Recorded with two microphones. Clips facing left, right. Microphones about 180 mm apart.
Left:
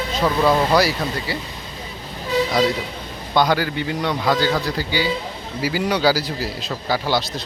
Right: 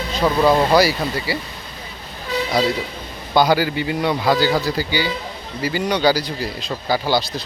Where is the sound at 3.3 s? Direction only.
5° right (ahead or behind).